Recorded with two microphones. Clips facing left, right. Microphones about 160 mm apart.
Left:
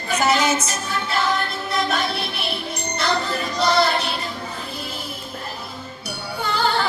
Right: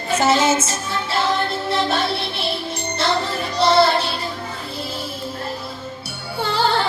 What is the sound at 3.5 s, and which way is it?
Music, 30° right (ahead or behind).